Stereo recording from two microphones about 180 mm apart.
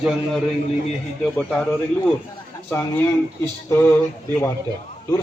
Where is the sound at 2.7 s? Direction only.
10° left (ahead or behind).